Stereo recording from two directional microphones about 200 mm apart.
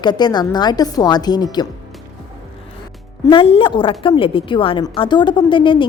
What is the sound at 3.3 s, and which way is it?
A woman's voice, 25° left (ahead or behind).